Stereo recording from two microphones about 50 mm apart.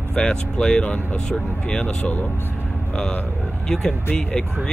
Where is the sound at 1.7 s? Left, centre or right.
Left.